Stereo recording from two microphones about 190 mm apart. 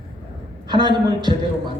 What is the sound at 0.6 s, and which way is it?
Speech, 25° right (ahead or behind).